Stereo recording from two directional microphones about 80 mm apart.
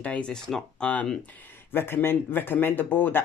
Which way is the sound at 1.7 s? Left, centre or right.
Left.